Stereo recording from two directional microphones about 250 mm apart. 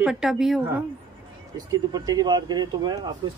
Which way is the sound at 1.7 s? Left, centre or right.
Centre.